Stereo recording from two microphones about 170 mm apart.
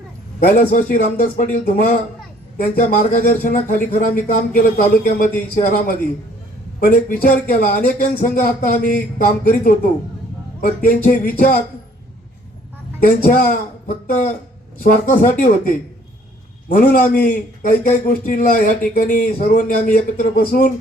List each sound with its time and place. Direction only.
0.3 s a man's voice: 50° left (ahead or behind)
10.8 s a man's voice: 55° left (ahead or behind)
13.1 s a man's voice: 55° left (ahead or behind)